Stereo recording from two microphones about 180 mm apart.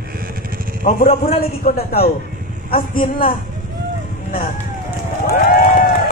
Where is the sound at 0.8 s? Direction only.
50° left (ahead or behind).